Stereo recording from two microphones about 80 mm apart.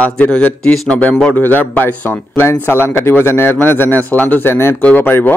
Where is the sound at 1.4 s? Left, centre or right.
Left.